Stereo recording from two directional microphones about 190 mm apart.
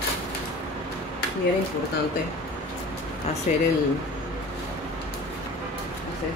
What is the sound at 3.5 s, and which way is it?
Speech, 35° left (ahead or behind).